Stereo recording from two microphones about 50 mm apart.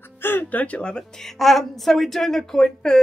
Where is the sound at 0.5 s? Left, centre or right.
Left.